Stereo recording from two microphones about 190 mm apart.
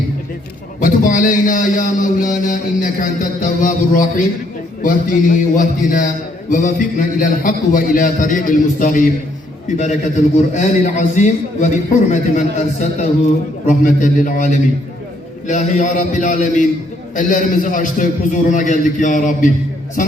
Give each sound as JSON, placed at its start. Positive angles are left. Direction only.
{"t": 0.8, "sound": "a man's voice", "side_deg": 45}